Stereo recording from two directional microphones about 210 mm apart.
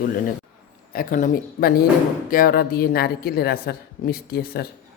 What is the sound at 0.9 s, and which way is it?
Speech, 40° left (ahead or behind).